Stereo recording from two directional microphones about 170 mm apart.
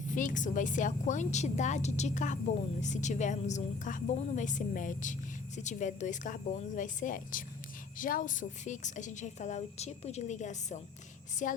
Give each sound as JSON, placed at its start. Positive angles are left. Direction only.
{"t": 0.1, "sound": "a woman's voice", "side_deg": 50}